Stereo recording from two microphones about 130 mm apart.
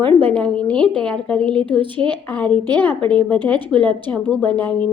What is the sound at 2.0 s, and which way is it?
Speech, 45° right (ahead or behind).